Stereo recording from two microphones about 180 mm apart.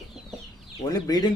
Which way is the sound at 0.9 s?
20° left (ahead or behind).